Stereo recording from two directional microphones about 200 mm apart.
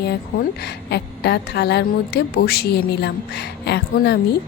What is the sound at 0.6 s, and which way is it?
A woman's voice, 55° left (ahead or behind).